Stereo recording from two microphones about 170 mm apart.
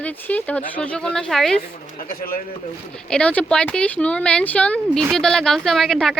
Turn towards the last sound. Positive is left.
turn(degrees=0)  # may be behind; listen again after turning